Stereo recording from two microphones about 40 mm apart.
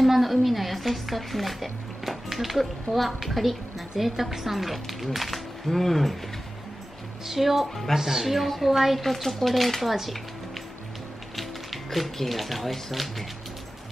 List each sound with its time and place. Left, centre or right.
0.0 s speech: centre
7.2 s speech: centre
7.9 s speech: centre
9.0 s speech: centre
11.3 s speech: centre